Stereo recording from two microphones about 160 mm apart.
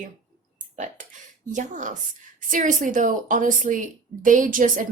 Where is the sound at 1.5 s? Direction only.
50° right (ahead or behind).